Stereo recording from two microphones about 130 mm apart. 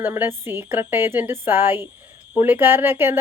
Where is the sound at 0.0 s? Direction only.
15° right (ahead or behind).